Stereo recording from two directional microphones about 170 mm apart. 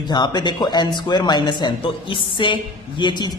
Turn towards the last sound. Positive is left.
turn(degrees=25)  # may be behind; listen again after turning